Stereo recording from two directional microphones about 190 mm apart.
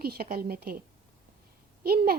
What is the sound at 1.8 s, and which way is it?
Speech, 55° right (ahead or behind).